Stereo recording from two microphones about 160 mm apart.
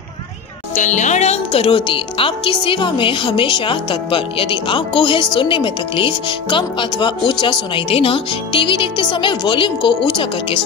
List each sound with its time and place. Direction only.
0.7 s a woman's voice: 50° left (ahead or behind); by 9.9 s 30° left (ahead or behind)